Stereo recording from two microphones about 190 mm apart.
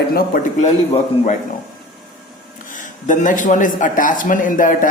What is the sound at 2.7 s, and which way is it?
A man's voice, 40° left (ahead or behind).